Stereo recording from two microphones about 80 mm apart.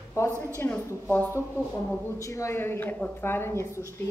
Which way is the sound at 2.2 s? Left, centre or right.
Left.